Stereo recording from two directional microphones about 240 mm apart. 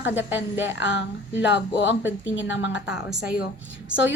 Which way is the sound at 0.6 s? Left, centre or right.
Left.